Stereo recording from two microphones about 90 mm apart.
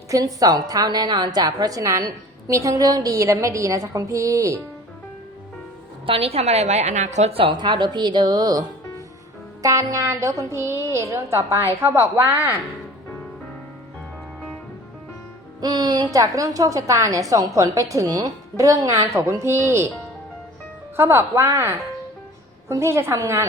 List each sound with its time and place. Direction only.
0.1 s a woman's voice: 40° right (ahead or behind)
6.1 s a woman's voice: 90° right
7.5 s a woman's voice: 55° right (ahead or behind)
9.6 s a woman's voice: 35° right (ahead or behind)
15.6 s a woman's voice: 50° right (ahead or behind)
16.1 s a woman's voice: 40° right (ahead or behind)
20.9 s speech: 25° right (ahead or behind)
22.7 s a woman's voice: 30° right (ahead or behind)